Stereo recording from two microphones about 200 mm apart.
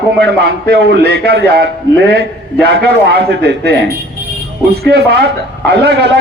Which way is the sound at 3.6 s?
55° right (ahead or behind).